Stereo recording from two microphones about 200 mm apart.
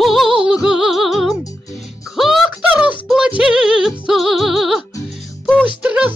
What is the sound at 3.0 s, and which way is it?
Music, centre (ahead or behind).